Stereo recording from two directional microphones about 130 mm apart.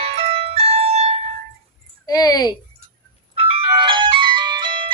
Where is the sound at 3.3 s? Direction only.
45° right (ahead or behind).